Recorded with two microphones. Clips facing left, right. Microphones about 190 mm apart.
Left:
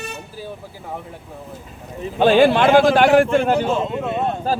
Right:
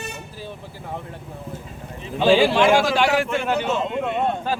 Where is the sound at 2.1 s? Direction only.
55° left (ahead or behind); by 4.6 s 40° left (ahead or behind).